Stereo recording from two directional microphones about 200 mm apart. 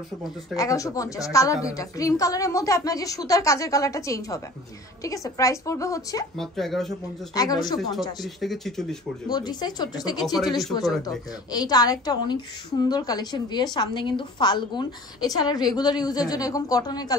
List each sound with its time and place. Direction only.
0.6 s a woman's voice: 15° left (ahead or behind)
6.3 s speech: centre (ahead or behind)
7.3 s a woman's voice: 20° left (ahead or behind)
8.2 s speech: centre (ahead or behind)
9.3 s a woman's voice: 20° left (ahead or behind)
10.2 s speech: centre (ahead or behind)
10.5 s a woman's voice: 20° left (ahead or behind)